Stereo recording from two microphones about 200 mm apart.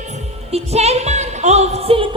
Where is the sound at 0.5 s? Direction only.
30° right (ahead or behind).